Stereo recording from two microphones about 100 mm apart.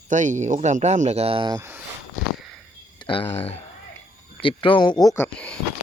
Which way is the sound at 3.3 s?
90° left.